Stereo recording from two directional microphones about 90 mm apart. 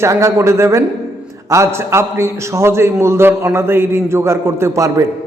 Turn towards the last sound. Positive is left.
turn(degrees=-35)  # may be behind; listen again after turning